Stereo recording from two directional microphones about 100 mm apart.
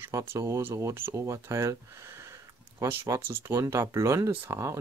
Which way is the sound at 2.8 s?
25° right (ahead or behind).